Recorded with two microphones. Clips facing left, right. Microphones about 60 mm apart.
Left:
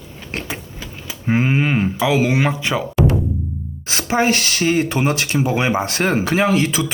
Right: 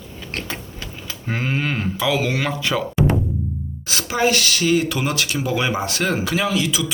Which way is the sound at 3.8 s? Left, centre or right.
Left.